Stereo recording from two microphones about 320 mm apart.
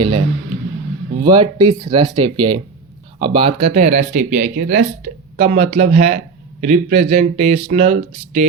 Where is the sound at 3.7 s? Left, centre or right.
Right.